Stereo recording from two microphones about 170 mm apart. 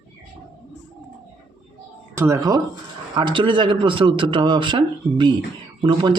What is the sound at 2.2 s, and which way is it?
Speech, 20° right (ahead or behind).